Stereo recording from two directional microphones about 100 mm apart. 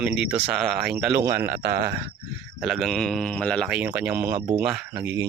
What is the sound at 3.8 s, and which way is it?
Speech, 15° right (ahead or behind).